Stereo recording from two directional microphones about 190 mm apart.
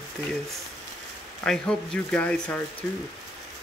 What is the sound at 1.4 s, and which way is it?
Speech, 5° left (ahead or behind).